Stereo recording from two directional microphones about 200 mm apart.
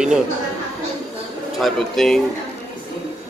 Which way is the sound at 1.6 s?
Centre (ahead or behind).